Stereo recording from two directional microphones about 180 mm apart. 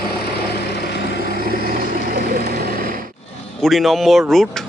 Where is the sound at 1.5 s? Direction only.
60° right (ahead or behind).